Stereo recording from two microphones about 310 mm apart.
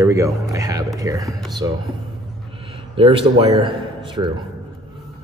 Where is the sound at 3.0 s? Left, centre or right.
Centre.